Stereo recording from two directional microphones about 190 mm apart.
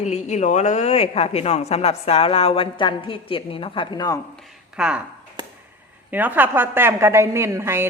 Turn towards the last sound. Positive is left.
turn(degrees=-15)  # may be behind; listen again after turning